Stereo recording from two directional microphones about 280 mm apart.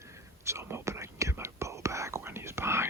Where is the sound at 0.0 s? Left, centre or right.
Centre.